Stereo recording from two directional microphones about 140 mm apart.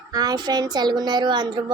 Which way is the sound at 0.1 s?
30° right (ahead or behind).